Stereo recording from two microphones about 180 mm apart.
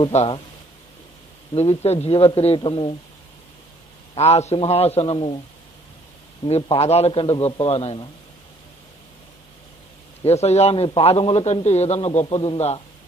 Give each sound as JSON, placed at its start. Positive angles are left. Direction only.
{"t": 0.1, "sound": "a man's voice", "side_deg": 40}
{"t": 1.5, "sound": "a man's voice", "side_deg": 35}
{"t": 4.1, "sound": "a man's voice", "side_deg": 35}
{"t": 6.4, "sound": "a man's voice", "side_deg": 35}
{"t": 10.2, "sound": "a man's voice", "side_deg": 35}